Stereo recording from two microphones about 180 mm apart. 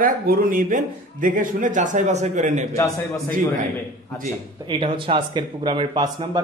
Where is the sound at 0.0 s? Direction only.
55° right (ahead or behind).